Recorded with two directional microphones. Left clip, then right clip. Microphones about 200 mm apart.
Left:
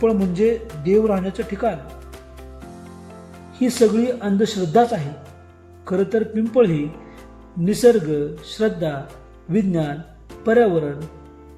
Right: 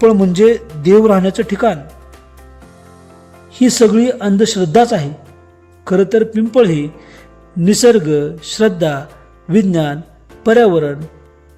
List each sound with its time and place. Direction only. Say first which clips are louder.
0.0 s speech: right 9 dB; 55° right (ahead or behind)
3.5 s speech: right 7 dB; 50° right (ahead or behind)